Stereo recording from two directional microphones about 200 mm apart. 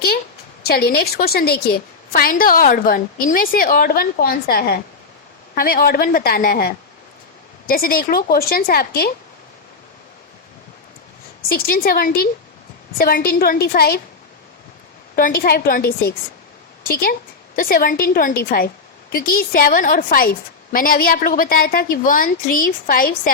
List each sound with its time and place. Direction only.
0.7 s a woman's voice: 50° left (ahead or behind)
11.5 s a woman's voice: 50° left (ahead or behind)
15.1 s a woman's voice: 45° left (ahead or behind)